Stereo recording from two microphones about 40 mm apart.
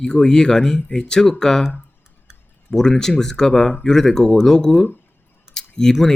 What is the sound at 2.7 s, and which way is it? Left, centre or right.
Speech, centre.